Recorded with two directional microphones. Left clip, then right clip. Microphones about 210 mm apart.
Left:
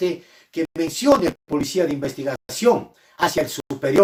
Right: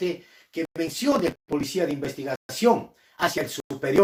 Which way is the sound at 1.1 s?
15° left (ahead or behind).